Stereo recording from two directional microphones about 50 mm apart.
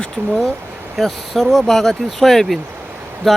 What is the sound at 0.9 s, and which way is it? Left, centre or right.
Speech, centre.